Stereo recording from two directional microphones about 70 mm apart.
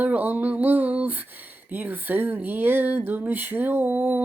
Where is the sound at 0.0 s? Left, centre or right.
Right.